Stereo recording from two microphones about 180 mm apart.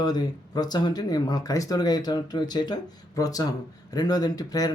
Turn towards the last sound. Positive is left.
turn(degrees=20)  # may be behind; listen again after turning